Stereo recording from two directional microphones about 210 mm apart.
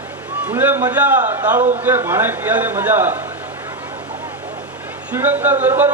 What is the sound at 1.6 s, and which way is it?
Speech, 35° right (ahead or behind).